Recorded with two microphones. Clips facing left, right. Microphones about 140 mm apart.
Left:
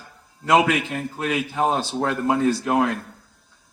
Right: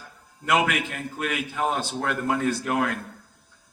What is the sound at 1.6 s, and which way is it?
A man's voice, 20° left (ahead or behind).